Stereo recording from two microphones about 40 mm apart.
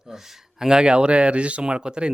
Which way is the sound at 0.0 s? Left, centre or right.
Centre.